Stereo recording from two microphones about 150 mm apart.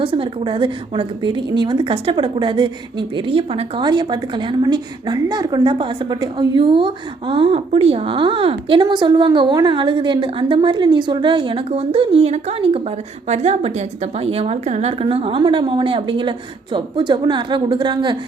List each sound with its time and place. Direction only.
0.0 s a woman's voice: 35° right (ahead or behind)